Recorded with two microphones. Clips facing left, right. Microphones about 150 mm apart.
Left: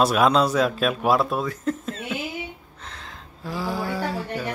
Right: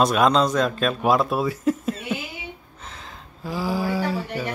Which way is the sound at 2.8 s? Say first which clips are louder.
Even; centre (ahead or behind).